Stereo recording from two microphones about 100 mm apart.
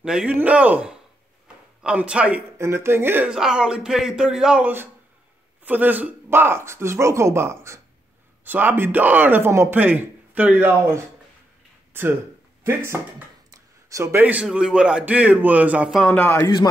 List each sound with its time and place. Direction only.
0.0 s a man's voice: 10° right (ahead or behind)
2.5 s speech: 25° right (ahead or behind)
3.3 s a man's voice: 5° right (ahead or behind); by 13.0 s 25° right (ahead or behind)
13.5 s a sound: 35° right (ahead or behind)
14.2 s a man's voice: 15° right (ahead or behind)
16.1 s speech: 20° left (ahead or behind)
16.3 s a man's voice: 40° left (ahead or behind)